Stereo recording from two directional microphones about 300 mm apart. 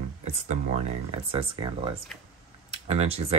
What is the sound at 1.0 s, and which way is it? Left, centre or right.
Speech, centre.